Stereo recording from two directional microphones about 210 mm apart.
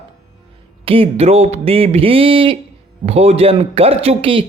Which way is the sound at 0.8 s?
25° right (ahead or behind).